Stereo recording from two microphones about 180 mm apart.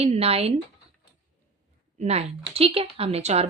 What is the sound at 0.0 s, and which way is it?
Speech, 35° right (ahead or behind).